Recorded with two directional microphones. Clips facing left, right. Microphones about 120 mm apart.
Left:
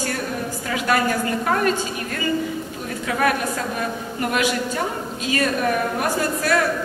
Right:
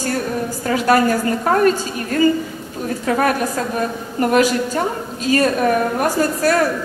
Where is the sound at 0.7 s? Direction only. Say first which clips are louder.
Right 6 dB; 40° right (ahead or behind).